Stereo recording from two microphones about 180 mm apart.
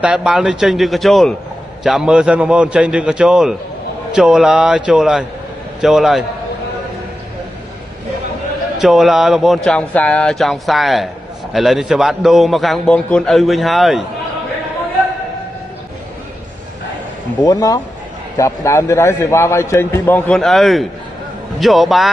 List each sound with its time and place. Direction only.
0.0 s a man's voice: 5° right (ahead or behind)
8.8 s a man's voice: centre (ahead or behind)
17.5 s a man's voice: 20° left (ahead or behind); by 22.1 s centre (ahead or behind)